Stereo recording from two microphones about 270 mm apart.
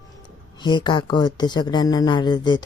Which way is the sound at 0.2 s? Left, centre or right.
Centre.